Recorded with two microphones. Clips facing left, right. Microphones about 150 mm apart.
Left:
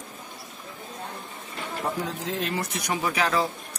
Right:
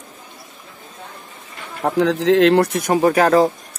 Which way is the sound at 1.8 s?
70° right (ahead or behind).